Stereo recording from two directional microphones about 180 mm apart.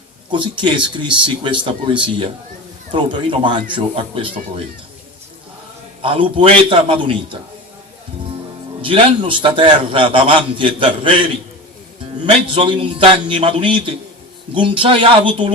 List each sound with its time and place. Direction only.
0.3 s a man's voice: 25° right (ahead or behind)
6.0 s a man's voice: 30° right (ahead or behind)
8.8 s a man's voice: 30° right (ahead or behind)
12.2 s a man's voice: 30° right (ahead or behind)